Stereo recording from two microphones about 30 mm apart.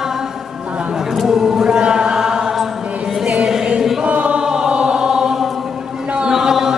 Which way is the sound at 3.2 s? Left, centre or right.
Right.